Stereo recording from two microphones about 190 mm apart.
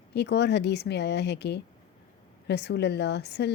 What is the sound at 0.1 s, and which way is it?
A woman's voice, 60° left (ahead or behind).